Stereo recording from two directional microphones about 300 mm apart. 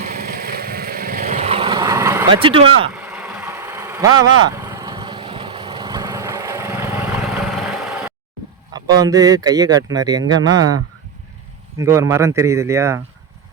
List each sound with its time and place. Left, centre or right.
0.0 s vehicle: right
2.9 s vehicle: centre
8.7 s speech: centre
11.8 s speech: centre